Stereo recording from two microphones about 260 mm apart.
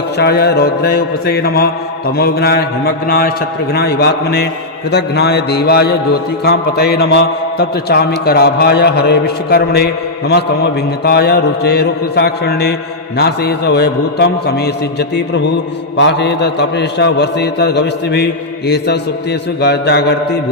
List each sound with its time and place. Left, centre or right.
0.2 s a man's voice: left